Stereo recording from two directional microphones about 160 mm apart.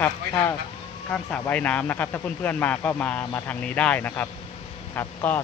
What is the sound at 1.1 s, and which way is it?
A man's voice, 10° left (ahead or behind).